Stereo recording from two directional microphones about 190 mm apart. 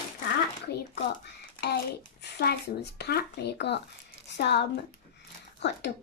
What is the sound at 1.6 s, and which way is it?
A child's voice, 60° left (ahead or behind).